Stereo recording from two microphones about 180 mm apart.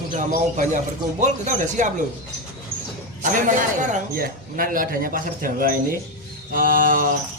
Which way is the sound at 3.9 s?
50° right (ahead or behind).